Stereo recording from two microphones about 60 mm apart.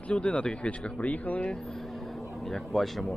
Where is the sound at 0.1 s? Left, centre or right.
Centre.